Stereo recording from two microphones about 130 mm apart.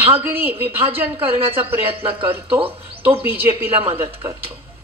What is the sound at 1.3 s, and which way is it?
Speech, 45° right (ahead or behind).